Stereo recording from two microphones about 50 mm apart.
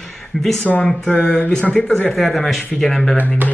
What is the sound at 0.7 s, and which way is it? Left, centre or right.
Speech, centre.